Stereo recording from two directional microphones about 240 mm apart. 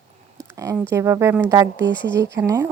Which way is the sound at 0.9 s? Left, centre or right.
Centre.